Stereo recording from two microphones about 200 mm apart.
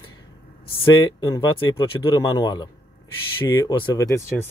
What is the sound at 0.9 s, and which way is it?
Speech, 20° left (ahead or behind).